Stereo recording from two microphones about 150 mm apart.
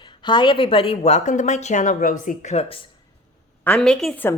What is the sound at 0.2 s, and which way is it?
A woman's voice, 30° left (ahead or behind).